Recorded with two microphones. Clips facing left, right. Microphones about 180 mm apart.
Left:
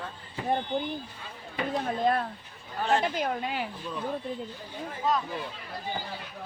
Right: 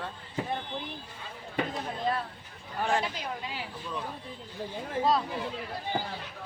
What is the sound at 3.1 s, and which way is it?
Speech, 55° left (ahead or behind).